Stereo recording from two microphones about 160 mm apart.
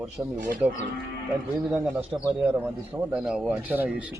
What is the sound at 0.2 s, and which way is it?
Speech, 20° right (ahead or behind).